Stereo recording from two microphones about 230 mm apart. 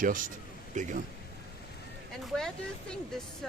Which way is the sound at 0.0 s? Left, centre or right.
Right.